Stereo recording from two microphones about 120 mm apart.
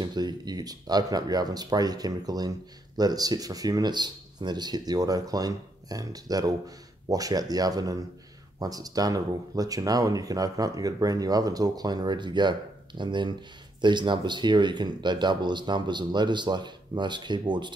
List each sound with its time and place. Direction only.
0.0 s speech: 35° right (ahead or behind)